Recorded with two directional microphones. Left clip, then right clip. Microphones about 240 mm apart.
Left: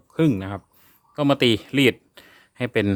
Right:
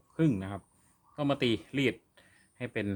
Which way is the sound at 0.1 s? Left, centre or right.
Left.